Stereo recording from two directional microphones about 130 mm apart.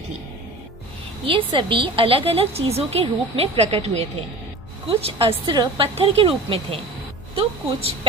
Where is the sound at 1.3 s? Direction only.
40° right (ahead or behind).